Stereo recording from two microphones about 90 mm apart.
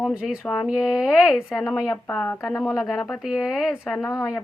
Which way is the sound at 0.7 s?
5° right (ahead or behind).